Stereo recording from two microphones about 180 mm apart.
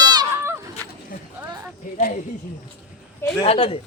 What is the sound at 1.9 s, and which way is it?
Speech, 45° left (ahead or behind).